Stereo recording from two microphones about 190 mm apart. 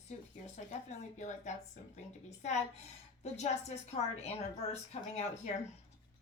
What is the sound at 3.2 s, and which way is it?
A woman's voice, 35° left (ahead or behind).